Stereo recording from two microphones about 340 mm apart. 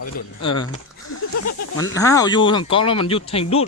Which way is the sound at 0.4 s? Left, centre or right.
Centre.